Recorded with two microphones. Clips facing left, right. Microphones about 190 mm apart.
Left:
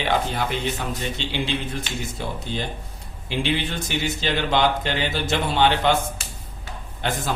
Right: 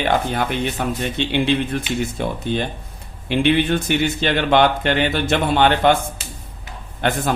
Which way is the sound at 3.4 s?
60° right (ahead or behind).